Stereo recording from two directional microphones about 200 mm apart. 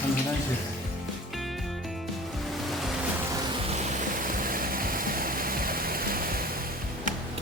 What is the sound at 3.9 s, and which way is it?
Waterfall, 45° right (ahead or behind).